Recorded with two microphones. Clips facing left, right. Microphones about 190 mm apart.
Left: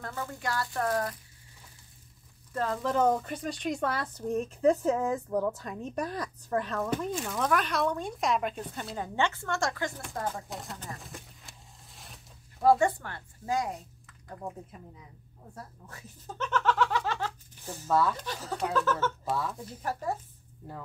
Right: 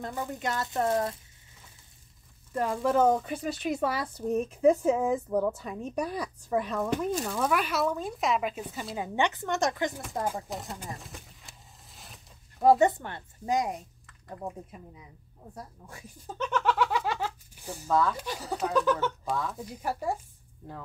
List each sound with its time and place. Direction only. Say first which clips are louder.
0.0 s speech: right 3 dB; 20° right (ahead or behind)
2.5 s speech: right 3 dB; 10° right (ahead or behind)
10.5 s speech: right 3 dB; centre (ahead or behind)
11.0 s a sound: even; centre (ahead or behind)
12.6 s speech: right 2 dB; 20° right (ahead or behind)
14.0 s speech: right 2 dB; 10° right (ahead or behind)
17.8 s speech: even; 5° left (ahead or behind)
18.1 s speech: right 2 dB; 10° right (ahead or behind)
19.2 s speech: even; 5° left (ahead or behind)
19.6 s speech: right 2 dB; 10° right (ahead or behind)